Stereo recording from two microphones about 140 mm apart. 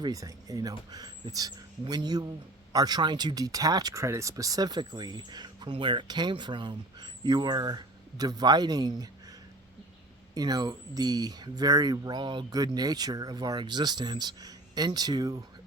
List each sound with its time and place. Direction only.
0.0 s speech: 25° right (ahead or behind)
10.3 s speech: 30° right (ahead or behind)